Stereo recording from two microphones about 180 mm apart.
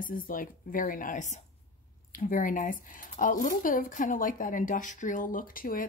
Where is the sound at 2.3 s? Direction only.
50° left (ahead or behind).